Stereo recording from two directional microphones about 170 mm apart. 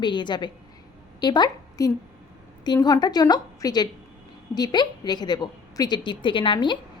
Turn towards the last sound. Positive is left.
turn(degrees=30)  # may be behind; listen again after turning